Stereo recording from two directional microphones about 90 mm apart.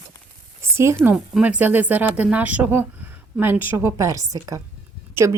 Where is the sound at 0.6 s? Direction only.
30° right (ahead or behind).